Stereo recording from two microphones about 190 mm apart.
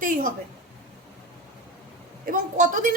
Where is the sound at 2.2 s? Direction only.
45° right (ahead or behind).